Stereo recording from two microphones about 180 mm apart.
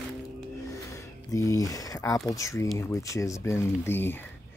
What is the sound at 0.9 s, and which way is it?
Speech, 20° left (ahead or behind).